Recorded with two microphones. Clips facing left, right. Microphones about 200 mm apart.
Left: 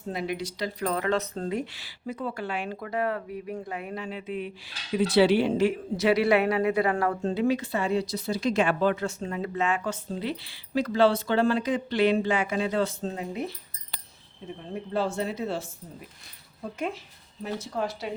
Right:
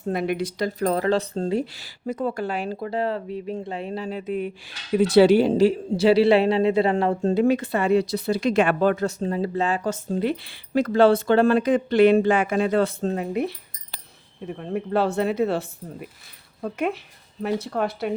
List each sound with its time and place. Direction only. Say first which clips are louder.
0.1 s speech: right 7 dB; 60° right (ahead or behind); by 7.3 s 25° right (ahead or behind)
7.3 s speech: right 7 dB; 50° right (ahead or behind)